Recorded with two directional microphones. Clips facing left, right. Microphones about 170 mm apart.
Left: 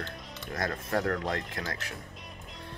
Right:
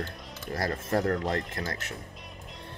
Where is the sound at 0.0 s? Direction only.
35° right (ahead or behind).